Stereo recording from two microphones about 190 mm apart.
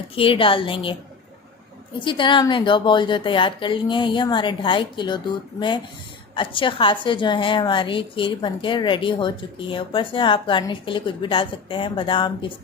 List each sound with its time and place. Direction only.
0.2 s a woman's voice: 30° left (ahead or behind)
2.0 s a woman's voice: 25° left (ahead or behind)